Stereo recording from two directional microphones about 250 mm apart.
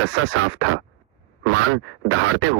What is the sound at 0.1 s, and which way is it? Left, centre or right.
Speech, right.